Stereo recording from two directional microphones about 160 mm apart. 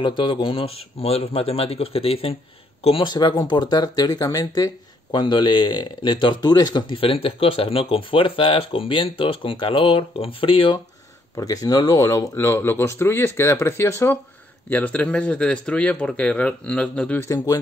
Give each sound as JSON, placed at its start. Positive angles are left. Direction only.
{"t": 0.0, "sound": "speech", "side_deg": 30}